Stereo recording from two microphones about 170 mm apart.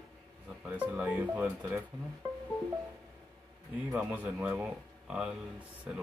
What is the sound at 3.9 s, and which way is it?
A man's voice, 10° right (ahead or behind).